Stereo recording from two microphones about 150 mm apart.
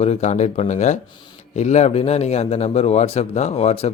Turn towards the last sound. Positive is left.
turn(degrees=45)  # may be behind; listen again after turning